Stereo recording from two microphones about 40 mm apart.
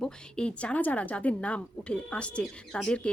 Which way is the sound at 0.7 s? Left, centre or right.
Left.